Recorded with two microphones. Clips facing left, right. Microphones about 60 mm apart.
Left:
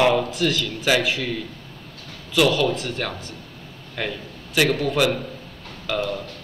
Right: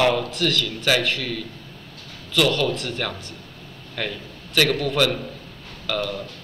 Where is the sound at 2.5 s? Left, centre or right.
Centre.